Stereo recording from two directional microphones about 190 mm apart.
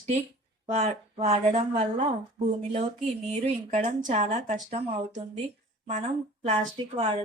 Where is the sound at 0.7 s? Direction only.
35° right (ahead or behind).